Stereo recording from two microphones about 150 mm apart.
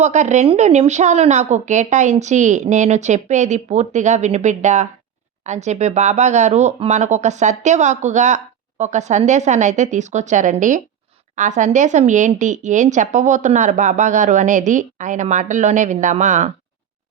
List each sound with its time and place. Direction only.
0.0 s a woman's voice: 50° right (ahead or behind)